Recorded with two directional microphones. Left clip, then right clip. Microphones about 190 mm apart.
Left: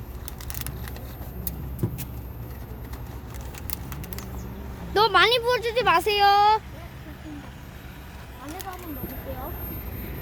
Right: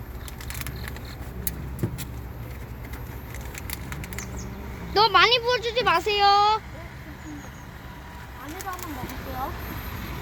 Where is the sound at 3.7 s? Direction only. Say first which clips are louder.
Right 3 dB; 30° left (ahead or behind).